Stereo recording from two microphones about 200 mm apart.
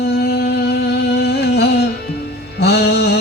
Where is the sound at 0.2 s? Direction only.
55° left (ahead or behind).